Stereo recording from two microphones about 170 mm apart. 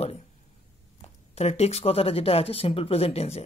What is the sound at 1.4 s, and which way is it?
Speech, 40° left (ahead or behind).